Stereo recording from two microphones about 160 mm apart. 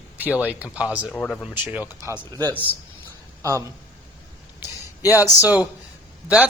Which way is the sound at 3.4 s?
20° right (ahead or behind).